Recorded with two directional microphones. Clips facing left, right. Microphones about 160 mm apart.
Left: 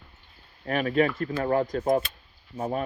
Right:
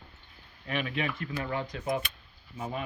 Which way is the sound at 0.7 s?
45° left (ahead or behind).